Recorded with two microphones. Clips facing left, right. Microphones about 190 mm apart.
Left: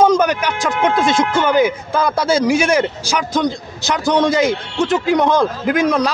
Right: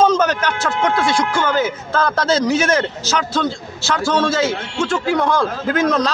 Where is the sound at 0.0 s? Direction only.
15° left (ahead or behind).